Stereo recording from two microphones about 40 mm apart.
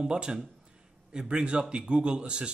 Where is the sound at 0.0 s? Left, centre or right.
Right.